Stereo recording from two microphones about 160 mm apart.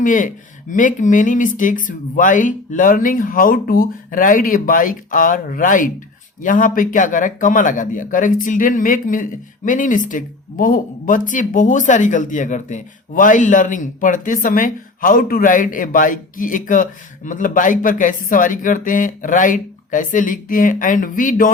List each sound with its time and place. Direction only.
0.0 s speech: 55° left (ahead or behind)